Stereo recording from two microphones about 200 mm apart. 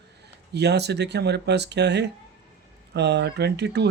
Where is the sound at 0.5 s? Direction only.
55° right (ahead or behind).